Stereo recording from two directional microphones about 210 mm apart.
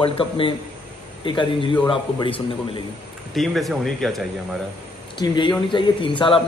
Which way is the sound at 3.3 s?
Centre (ahead or behind).